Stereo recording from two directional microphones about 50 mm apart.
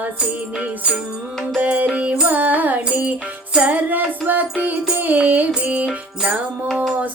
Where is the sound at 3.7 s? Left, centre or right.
Right.